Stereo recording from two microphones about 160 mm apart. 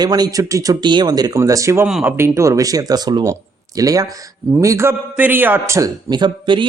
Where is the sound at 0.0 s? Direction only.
25° right (ahead or behind).